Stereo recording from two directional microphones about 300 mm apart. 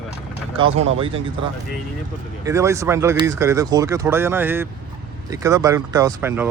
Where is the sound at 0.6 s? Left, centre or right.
Right.